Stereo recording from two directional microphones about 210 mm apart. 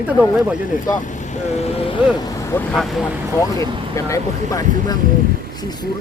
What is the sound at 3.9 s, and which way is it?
Speech, 15° left (ahead or behind).